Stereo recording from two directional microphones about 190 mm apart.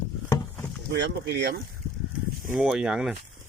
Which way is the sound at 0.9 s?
65° right (ahead or behind).